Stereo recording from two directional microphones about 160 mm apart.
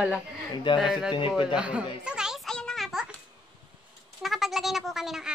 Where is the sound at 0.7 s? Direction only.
30° left (ahead or behind).